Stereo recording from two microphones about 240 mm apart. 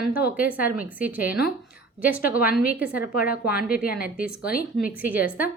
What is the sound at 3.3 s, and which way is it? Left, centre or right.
Speech, left.